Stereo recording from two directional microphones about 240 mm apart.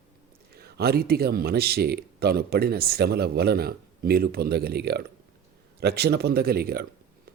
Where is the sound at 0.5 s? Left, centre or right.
Right.